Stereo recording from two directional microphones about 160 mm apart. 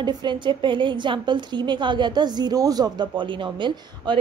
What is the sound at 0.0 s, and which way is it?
A woman's voice, 30° right (ahead or behind).